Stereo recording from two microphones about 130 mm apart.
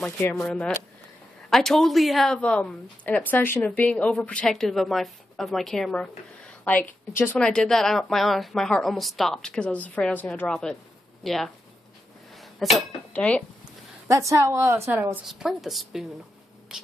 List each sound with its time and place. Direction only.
0.4 s a woman's voice: 5° left (ahead or behind)
7.3 s speech: 5° left (ahead or behind)
12.5 s speech: centre (ahead or behind)
14.0 s speech: 25° right (ahead or behind)
14.9 s a woman's voice: 10° right (ahead or behind)